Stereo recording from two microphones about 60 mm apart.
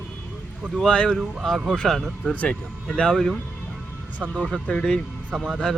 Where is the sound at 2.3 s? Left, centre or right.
Centre.